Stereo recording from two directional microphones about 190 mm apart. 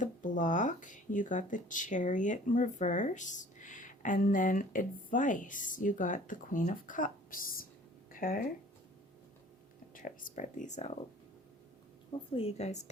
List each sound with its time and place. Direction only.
0.0 s speech: 40° left (ahead or behind)
9.9 s speech: 45° left (ahead or behind)
12.3 s speech: 30° left (ahead or behind)